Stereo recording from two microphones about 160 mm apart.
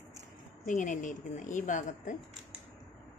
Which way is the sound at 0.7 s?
50° left (ahead or behind).